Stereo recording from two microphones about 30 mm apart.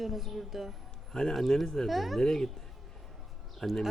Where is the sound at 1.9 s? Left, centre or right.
Centre.